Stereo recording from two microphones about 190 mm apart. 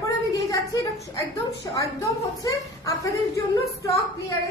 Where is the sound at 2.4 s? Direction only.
15° left (ahead or behind).